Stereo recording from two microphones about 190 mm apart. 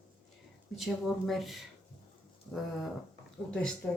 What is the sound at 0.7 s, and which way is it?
Speech, centre (ahead or behind).